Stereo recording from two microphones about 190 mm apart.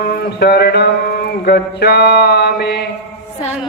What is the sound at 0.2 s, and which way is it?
Mantra, 60° left (ahead or behind).